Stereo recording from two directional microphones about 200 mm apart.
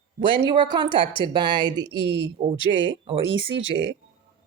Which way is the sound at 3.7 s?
20° left (ahead or behind).